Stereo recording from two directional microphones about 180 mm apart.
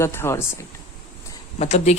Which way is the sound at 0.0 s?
15° left (ahead or behind).